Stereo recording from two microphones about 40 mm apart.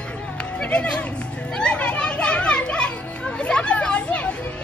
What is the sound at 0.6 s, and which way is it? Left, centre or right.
Music, left.